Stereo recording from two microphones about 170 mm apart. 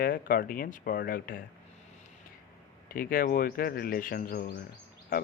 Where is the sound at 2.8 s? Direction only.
60° left (ahead or behind).